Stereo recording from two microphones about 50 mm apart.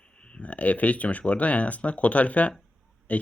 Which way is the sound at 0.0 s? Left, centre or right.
Left.